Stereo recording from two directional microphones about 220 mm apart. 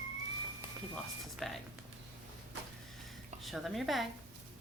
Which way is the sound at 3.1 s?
Centre (ahead or behind).